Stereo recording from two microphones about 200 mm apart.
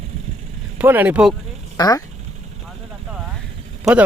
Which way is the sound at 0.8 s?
10° right (ahead or behind).